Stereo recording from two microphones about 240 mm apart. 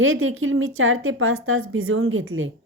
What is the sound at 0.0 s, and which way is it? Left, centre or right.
A woman's voice, right.